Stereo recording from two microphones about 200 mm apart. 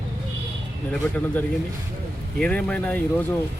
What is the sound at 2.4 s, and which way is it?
Speech, 5° left (ahead or behind).